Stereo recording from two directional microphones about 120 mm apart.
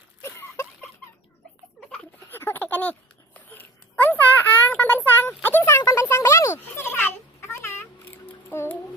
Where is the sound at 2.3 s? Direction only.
15° left (ahead or behind).